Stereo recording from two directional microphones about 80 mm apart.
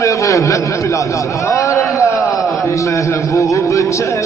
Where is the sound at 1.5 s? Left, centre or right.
Left.